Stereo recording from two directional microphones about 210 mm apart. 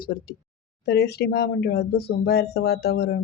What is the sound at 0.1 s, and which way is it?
Speech, 45° left (ahead or behind).